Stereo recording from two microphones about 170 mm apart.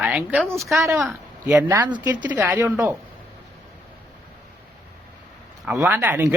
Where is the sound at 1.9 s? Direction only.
25° right (ahead or behind).